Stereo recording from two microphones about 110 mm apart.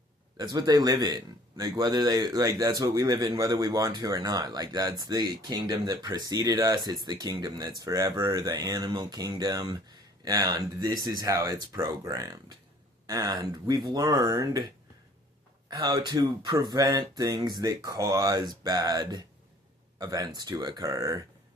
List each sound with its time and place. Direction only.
0.3 s a man's voice: 40° right (ahead or behind)
15.8 s a man's voice: 35° right (ahead or behind)